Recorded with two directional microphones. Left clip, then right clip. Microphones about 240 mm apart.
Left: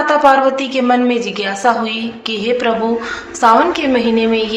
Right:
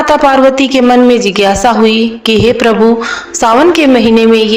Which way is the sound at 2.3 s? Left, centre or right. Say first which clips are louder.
Right 8 dB; right.